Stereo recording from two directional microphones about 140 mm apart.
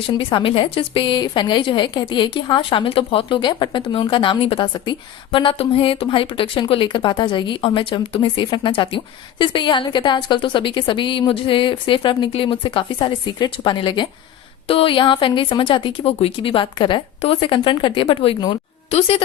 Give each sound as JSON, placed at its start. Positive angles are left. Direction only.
{"t": 0.2, "sound": "a woman's voice", "side_deg": 40}